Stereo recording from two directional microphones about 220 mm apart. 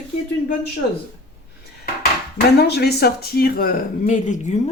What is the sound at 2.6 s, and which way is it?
Speech, 45° left (ahead or behind).